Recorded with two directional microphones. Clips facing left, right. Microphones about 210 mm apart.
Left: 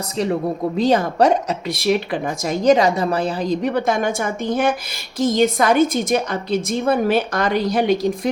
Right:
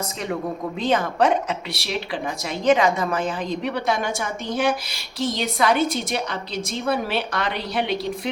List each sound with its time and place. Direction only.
0.8 s a woman's voice: 40° left (ahead or behind)